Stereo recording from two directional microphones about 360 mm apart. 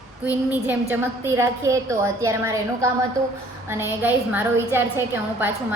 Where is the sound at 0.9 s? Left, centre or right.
Centre.